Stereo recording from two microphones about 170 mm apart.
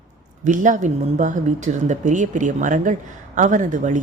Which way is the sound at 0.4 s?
50° right (ahead or behind).